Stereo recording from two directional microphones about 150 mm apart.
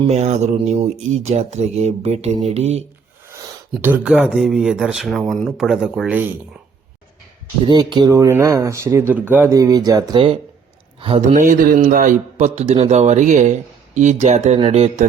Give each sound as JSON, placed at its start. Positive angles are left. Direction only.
{"t": 0.0, "sound": "speech", "side_deg": -45}
{"t": 3.8, "sound": "speech", "side_deg": -10}
{"t": 7.7, "sound": "a man's voice", "side_deg": -30}
{"t": 11.3, "sound": "speech", "side_deg": -65}